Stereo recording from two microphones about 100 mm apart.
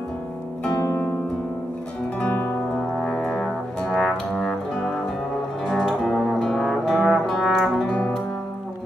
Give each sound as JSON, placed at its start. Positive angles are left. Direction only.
{"t": 0.8, "sound": "harp", "side_deg": 25}
{"t": 2.1, "sound": "brass instrument", "side_deg": 15}
{"t": 5.7, "sound": "trombone", "side_deg": 0}
{"t": 7.9, "sound": "music", "side_deg": 10}